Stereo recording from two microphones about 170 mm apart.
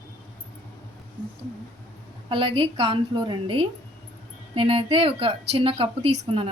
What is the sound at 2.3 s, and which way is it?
Speech, 30° right (ahead or behind).